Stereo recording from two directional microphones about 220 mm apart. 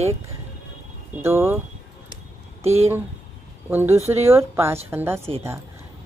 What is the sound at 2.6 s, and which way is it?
Speech, 30° right (ahead or behind).